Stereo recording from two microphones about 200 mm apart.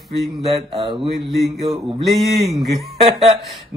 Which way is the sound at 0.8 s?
25° right (ahead or behind).